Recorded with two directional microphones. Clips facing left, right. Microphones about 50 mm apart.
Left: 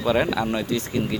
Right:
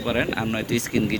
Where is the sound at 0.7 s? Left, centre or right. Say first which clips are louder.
Right 2 dB; right.